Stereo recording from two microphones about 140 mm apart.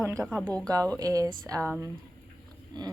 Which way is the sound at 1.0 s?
25° right (ahead or behind).